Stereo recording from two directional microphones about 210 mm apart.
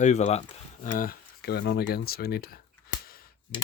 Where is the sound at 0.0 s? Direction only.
35° left (ahead or behind).